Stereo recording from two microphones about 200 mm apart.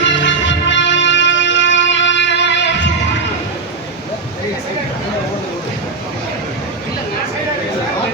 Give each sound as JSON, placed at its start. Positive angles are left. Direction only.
{"t": 0.0, "sound": "music", "side_deg": 65}